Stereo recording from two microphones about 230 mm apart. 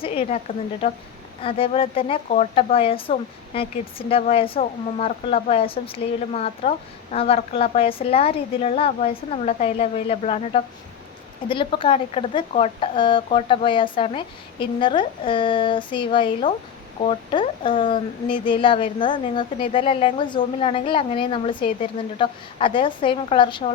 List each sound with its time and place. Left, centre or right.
0.0 s a woman's voice: left